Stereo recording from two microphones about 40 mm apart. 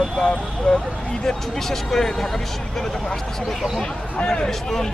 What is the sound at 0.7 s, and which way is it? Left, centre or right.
Speech, left.